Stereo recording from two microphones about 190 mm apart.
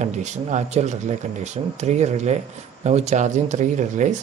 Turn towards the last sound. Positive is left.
turn(degrees=-40)  # may be behind; listen again after turning